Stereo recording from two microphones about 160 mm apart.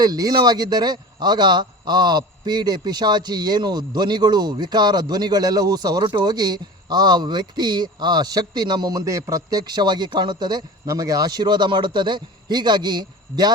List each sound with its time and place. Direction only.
0.0 s speech: 25° right (ahead or behind)